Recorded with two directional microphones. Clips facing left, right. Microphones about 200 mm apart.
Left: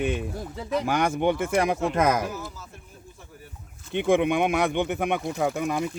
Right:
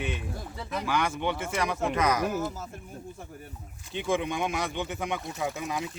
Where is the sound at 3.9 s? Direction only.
60° left (ahead or behind).